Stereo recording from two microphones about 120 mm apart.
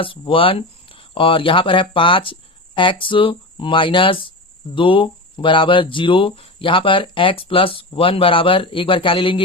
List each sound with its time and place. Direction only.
0.0 s speech: 45° left (ahead or behind)